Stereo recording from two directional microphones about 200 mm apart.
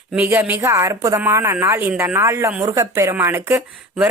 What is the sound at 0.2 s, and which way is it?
A woman's voice, 10° right (ahead or behind).